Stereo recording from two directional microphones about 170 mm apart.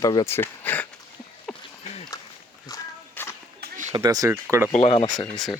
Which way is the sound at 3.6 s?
65° right (ahead or behind).